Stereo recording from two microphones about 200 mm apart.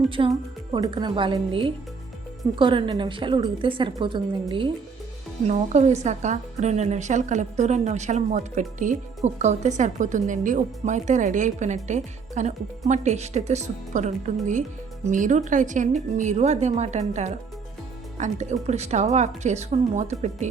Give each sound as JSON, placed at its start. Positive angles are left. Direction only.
{"t": 0.1, "sound": "a woman's voice", "side_deg": -25}
{"t": 5.5, "sound": "a woman's voice", "side_deg": -35}